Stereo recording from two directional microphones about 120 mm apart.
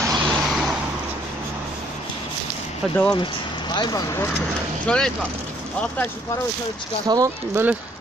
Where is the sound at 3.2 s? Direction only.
40° left (ahead or behind).